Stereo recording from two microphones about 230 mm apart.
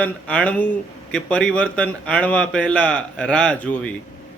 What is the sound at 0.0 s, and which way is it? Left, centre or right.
A man's voice, centre.